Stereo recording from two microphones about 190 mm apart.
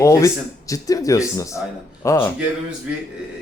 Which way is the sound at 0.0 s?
15° left (ahead or behind).